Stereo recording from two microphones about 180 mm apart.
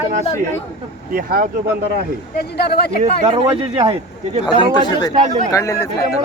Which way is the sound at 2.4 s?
60° left (ahead or behind).